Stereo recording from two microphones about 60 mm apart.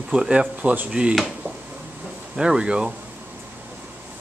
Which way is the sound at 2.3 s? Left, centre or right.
Centre.